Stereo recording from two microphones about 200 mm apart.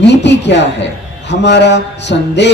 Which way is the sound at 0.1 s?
60° left (ahead or behind).